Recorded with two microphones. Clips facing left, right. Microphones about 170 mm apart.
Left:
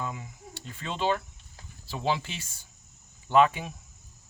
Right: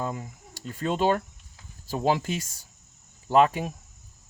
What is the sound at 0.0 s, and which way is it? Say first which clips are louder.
Speech: right 4 dB; 40° right (ahead or behind).